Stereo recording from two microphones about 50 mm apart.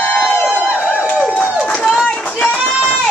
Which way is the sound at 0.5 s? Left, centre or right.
Centre.